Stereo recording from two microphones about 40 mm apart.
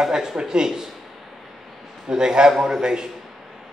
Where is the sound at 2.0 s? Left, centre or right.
Centre.